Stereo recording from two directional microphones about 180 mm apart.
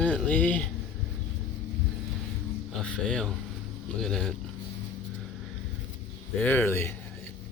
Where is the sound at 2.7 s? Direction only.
5° left (ahead or behind).